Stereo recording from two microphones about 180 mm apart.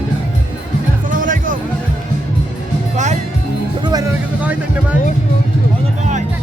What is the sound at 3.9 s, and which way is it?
Music, 20° right (ahead or behind).